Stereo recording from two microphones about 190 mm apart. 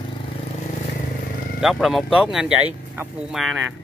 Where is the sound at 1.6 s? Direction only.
Centre (ahead or behind).